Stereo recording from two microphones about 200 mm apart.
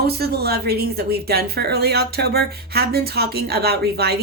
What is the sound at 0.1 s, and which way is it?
Speech, 50° right (ahead or behind).